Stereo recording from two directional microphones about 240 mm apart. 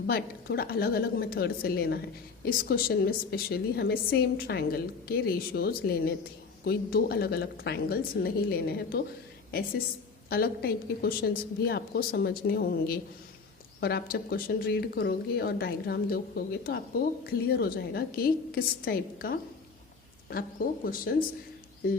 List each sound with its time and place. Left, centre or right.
0.1 s a woman's voice: left
10.2 s a woman's voice: left